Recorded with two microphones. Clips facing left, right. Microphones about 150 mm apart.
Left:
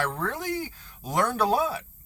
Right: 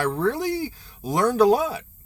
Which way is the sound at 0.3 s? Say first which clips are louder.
Right 5 dB; 10° right (ahead or behind).